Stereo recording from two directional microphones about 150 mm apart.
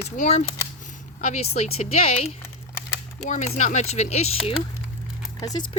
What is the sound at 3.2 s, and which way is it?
Speech, 55° left (ahead or behind).